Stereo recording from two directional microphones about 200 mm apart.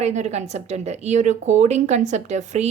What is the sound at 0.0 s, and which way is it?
Speech, 35° right (ahead or behind).